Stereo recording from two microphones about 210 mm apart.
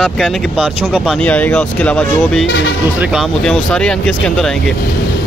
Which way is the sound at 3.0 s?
Centre (ahead or behind).